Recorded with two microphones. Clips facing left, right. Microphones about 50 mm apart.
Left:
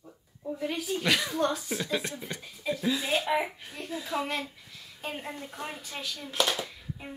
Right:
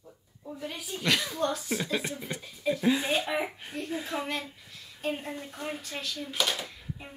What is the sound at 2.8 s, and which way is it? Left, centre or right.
A woman's voice, right.